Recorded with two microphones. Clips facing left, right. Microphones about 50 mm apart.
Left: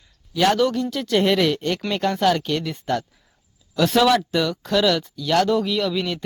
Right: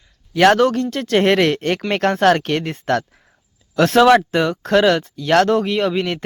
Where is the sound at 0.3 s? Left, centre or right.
Right.